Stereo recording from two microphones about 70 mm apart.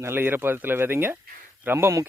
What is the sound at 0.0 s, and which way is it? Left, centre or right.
Speech, right.